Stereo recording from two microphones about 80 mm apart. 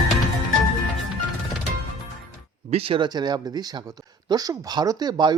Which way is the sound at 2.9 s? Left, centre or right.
Right.